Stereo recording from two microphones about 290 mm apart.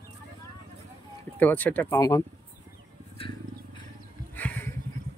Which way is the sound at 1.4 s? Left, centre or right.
Centre.